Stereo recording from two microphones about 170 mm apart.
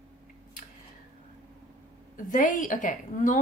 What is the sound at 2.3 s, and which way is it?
A woman's voice, 50° left (ahead or behind).